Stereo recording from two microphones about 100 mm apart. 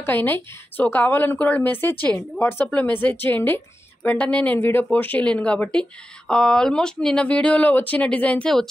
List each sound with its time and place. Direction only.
0.0 s a woman's voice: 20° left (ahead or behind)